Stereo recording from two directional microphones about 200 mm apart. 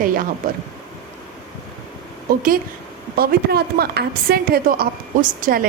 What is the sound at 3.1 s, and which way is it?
A woman's voice, 50° right (ahead or behind).